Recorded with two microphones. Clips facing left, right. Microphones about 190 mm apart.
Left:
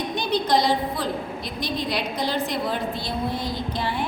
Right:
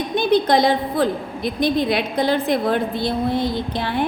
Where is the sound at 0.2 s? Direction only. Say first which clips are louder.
Right 6 dB; 55° right (ahead or behind).